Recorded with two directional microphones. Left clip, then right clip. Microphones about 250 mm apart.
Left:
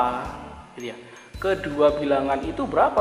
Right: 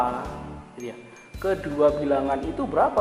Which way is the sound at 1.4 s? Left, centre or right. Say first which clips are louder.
Left 1 dB; centre.